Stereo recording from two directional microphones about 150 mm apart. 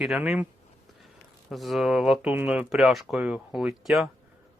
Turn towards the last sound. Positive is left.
turn(degrees=0)  # may be behind; listen again after turning